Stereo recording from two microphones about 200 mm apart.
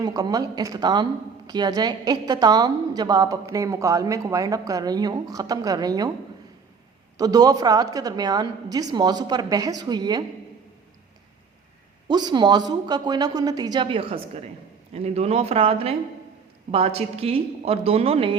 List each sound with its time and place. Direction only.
0.0 s a woman's voice: 20° right (ahead or behind)
7.2 s a woman's voice: 20° right (ahead or behind)
12.0 s a woman's voice: 20° right (ahead or behind)